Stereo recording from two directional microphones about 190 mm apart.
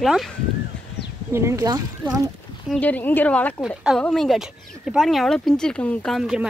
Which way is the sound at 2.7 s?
10° left (ahead or behind).